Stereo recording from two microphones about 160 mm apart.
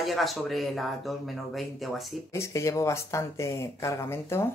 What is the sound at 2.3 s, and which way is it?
Speech, 15° left (ahead or behind).